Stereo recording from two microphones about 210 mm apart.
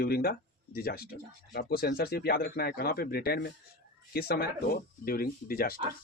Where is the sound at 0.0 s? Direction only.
45° left (ahead or behind).